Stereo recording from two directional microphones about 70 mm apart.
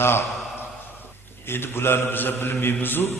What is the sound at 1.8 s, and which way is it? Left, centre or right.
A man's voice, left.